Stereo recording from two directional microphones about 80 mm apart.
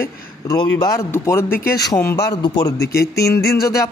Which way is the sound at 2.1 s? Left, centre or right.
Left.